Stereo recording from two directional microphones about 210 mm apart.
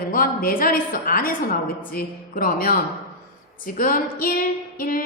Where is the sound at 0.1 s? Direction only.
45° left (ahead or behind).